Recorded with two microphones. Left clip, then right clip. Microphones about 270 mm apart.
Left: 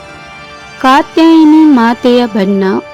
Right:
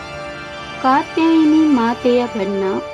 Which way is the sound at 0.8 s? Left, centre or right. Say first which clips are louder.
Left 8 dB; left.